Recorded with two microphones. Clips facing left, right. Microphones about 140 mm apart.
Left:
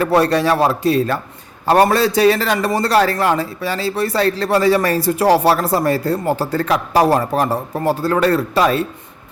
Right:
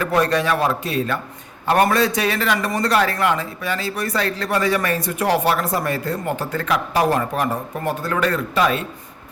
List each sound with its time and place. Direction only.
0.0 s a man's voice: 35° left (ahead or behind)